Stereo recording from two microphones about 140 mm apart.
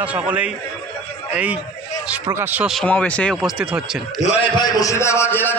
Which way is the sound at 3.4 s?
5° right (ahead or behind).